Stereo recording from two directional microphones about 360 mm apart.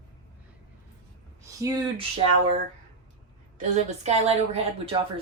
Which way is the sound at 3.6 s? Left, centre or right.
Centre.